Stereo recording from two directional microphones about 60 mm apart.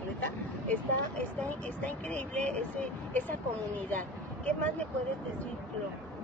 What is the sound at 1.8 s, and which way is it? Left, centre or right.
Speech, left.